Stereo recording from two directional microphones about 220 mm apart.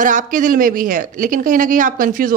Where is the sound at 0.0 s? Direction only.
35° right (ahead or behind).